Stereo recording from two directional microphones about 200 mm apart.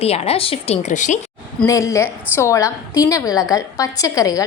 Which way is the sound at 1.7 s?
15° left (ahead or behind).